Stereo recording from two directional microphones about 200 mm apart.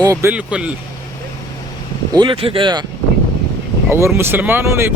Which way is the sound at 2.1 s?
25° right (ahead or behind).